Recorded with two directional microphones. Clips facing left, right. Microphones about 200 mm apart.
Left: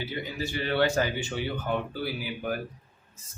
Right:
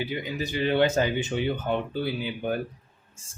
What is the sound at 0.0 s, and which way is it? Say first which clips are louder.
Speech: right 3 dB; 15° right (ahead or behind).